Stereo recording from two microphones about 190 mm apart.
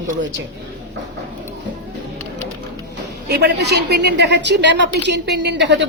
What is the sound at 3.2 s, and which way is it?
A woman's voice, 60° right (ahead or behind).